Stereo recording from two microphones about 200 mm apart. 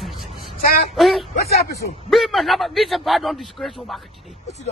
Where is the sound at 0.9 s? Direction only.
Centre (ahead or behind).